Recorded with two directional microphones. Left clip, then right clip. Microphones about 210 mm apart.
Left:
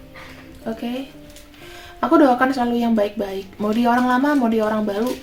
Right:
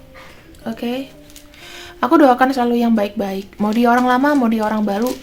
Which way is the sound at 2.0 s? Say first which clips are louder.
Right 3 dB; 30° right (ahead or behind).